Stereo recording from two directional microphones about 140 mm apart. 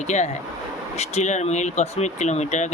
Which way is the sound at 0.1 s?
55° left (ahead or behind).